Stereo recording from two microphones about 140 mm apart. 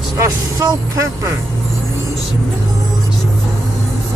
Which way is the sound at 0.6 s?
20° right (ahead or behind).